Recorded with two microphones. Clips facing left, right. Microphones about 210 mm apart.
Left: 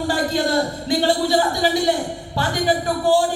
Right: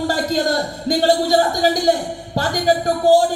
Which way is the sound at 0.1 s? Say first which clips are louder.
Right 1 dB; 40° right (ahead or behind).